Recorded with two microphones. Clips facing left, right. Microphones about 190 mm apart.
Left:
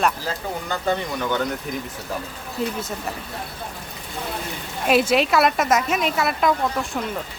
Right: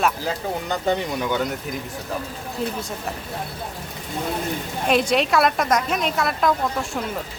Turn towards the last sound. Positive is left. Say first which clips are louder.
# even
turn(degrees=0)  # may be behind; listen again after turning